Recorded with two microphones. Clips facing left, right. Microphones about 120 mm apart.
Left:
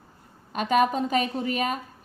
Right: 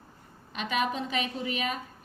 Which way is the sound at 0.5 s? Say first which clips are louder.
Left 8 dB; 45° left (ahead or behind).